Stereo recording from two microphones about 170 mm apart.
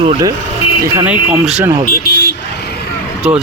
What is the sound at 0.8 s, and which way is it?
Speech, 10° right (ahead or behind).